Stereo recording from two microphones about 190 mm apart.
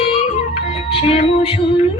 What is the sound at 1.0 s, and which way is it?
Speech, 35° left (ahead or behind).